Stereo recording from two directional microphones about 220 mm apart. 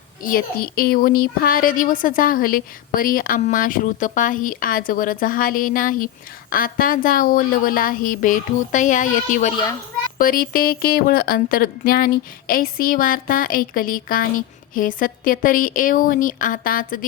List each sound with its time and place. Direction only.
0.2 s speech: 40° left (ahead or behind)